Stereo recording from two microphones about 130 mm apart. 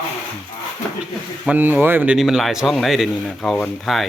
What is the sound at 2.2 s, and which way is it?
Speech, centre (ahead or behind).